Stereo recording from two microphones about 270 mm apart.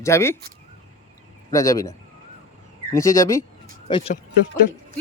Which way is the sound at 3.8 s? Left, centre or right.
Left.